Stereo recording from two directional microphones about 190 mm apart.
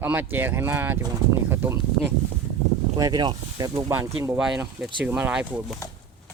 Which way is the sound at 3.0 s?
20° right (ahead or behind).